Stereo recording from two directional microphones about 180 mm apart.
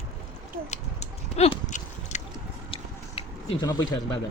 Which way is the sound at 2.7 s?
30° left (ahead or behind).